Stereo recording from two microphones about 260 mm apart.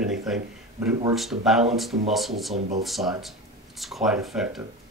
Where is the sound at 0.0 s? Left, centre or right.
Centre.